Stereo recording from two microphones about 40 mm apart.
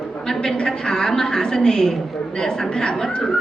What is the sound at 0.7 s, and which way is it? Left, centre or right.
A woman's voice, centre.